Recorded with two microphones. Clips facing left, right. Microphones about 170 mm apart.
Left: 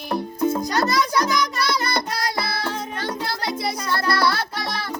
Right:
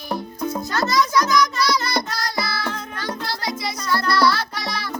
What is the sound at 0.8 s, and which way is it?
Music, 55° left (ahead or behind).